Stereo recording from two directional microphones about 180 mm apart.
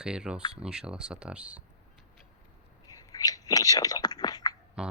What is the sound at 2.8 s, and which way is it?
Whispering, 20° left (ahead or behind).